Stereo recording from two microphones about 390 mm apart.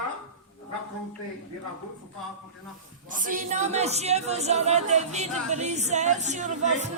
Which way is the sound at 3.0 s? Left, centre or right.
Centre.